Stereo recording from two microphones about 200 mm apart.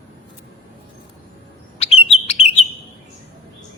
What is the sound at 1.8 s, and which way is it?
Chirp, 30° left (ahead or behind).